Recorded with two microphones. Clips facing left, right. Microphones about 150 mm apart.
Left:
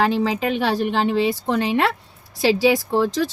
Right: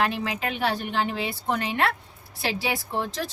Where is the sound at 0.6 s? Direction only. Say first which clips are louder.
Left 4 dB; 90° left.